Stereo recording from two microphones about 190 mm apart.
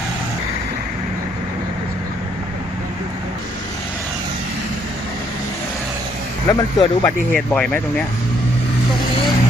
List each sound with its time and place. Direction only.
6.5 s speech: 20° left (ahead or behind)
7.3 s speech: 5° left (ahead or behind)